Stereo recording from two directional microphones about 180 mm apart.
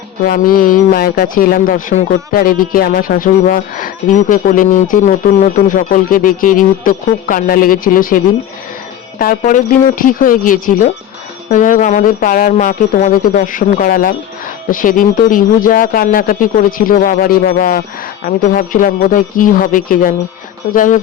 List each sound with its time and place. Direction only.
0.3 s speech: 50° left (ahead or behind)